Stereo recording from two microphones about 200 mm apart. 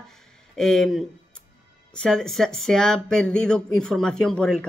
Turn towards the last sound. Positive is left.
turn(degrees=5)  # may be behind; listen again after turning